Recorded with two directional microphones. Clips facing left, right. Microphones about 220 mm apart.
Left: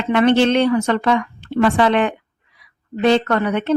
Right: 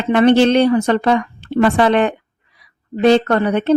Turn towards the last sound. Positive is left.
turn(degrees=-35)  # may be behind; listen again after turning